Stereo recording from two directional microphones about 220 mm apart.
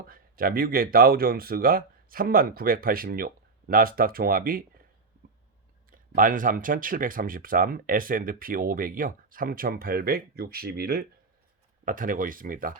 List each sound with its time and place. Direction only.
0.1 s speech: 40° right (ahead or behind)
5.9 s speech: 35° right (ahead or behind)